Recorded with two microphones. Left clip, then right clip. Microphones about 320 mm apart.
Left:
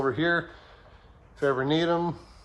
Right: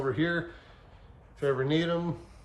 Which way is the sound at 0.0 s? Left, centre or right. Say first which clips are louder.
Left 4 dB; centre.